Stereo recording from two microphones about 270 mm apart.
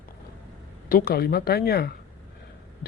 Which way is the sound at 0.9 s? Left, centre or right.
Left.